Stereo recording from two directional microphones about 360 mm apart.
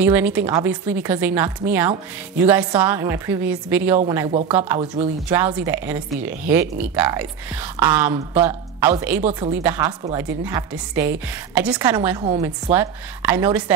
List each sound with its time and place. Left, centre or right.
0.0 s speech: centre
4.3 s a woman's voice: centre